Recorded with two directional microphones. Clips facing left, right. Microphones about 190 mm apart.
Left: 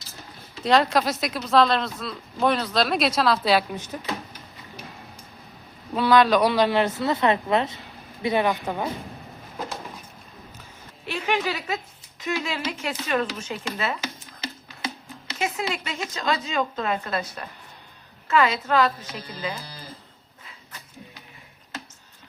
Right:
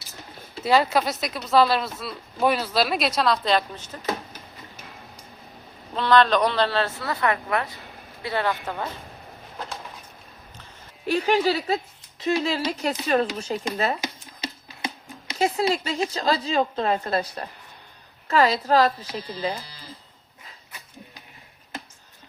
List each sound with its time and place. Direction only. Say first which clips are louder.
0.6 s speech: even; 5° right (ahead or behind); by 4.0 s 10° left (ahead or behind)
5.9 s a woman's voice: left 1 dB; 10° left (ahead or behind)
11.0 s a woman's voice: right 5 dB; 40° right (ahead or behind)
15.4 s a woman's voice: right 6 dB; 35° right (ahead or behind)